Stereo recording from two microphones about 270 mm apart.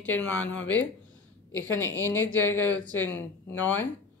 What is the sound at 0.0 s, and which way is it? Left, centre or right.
Speech, centre.